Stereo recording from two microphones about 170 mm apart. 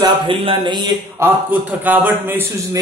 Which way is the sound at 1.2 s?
15° right (ahead or behind).